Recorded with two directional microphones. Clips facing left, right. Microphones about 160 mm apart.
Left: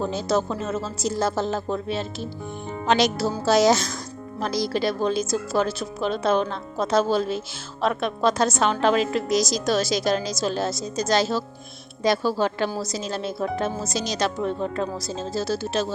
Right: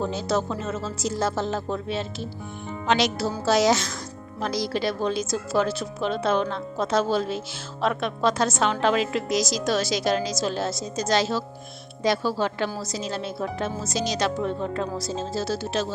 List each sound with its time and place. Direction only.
0.1 s a woman's voice: 40° left (ahead or behind)